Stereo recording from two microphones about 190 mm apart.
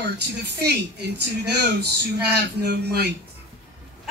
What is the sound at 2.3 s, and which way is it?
Speech, 60° right (ahead or behind).